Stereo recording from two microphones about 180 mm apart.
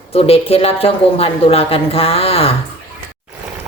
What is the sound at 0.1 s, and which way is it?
A woman's voice, 35° left (ahead or behind).